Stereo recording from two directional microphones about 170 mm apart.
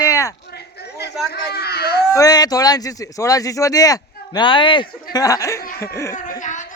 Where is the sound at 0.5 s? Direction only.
75° left (ahead or behind).